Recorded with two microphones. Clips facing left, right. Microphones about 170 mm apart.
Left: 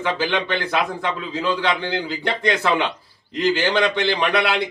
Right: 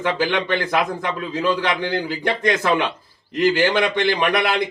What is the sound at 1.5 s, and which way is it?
Speech, 15° right (ahead or behind).